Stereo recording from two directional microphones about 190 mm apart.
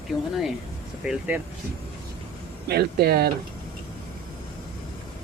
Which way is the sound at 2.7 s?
55° right (ahead or behind).